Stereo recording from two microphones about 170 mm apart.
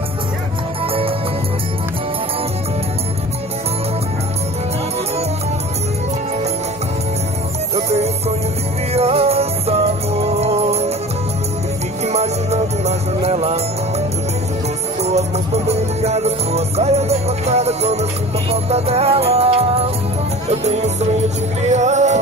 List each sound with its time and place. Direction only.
7.7 s music: 40° right (ahead or behind)
12.0 s music: 40° right (ahead or behind)